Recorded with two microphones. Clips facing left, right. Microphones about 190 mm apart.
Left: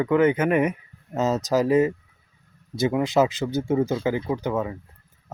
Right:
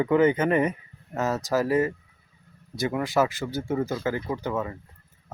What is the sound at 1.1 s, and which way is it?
Speech, 20° left (ahead or behind).